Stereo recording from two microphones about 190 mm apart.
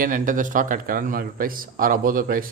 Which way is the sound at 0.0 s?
45° right (ahead or behind).